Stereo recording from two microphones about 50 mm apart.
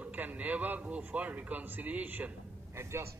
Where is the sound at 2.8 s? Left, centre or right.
Right.